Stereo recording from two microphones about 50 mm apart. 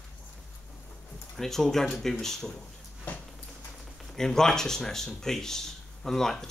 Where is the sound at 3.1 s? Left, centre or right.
Left.